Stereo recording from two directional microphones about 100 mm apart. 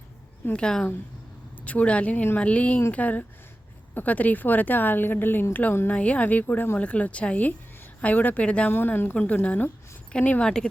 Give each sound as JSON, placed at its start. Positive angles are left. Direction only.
{"t": 0.5, "sound": "a woman's voice", "side_deg": 10}